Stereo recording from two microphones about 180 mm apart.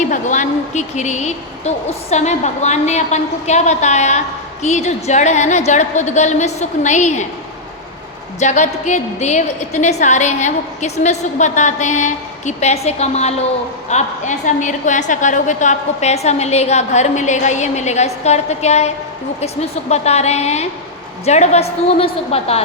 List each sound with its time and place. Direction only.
0.1 s a woman's voice: 45° left (ahead or behind)
8.4 s a woman's voice: 40° left (ahead or behind)